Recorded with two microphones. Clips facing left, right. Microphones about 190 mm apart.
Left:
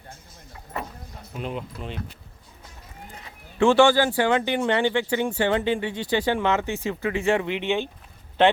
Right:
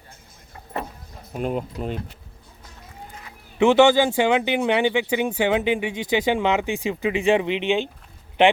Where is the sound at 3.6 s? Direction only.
20° right (ahead or behind).